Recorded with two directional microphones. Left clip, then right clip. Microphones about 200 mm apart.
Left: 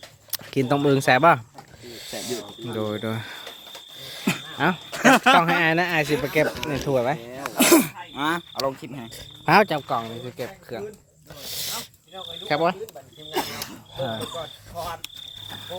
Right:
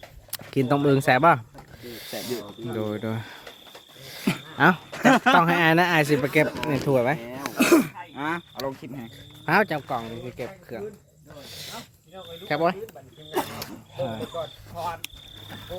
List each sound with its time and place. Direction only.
0.3 s speech: 5° left (ahead or behind)
4.5 s speech: 15° right (ahead or behind)
4.9 s speech: 30° left (ahead or behind)
5.4 s speech: 10° right (ahead or behind)
7.5 s a sound: 40° left (ahead or behind)
8.1 s speech: 55° left (ahead or behind)
9.5 s speech: 30° left (ahead or behind)
11.4 s a sound: 40° left (ahead or behind)
12.5 s speech: 20° left (ahead or behind)
13.3 s wild animals: 55° left (ahead or behind)
14.1 s speech: 55° left (ahead or behind)